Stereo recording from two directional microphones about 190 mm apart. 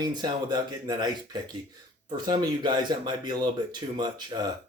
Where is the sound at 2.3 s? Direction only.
25° right (ahead or behind).